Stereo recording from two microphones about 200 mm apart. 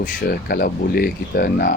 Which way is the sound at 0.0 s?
50° left (ahead or behind).